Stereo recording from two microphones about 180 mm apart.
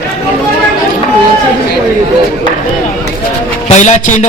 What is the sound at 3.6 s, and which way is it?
Speech, 40° left (ahead or behind).